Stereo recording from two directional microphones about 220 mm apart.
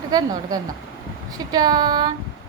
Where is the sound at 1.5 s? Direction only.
20° right (ahead or behind).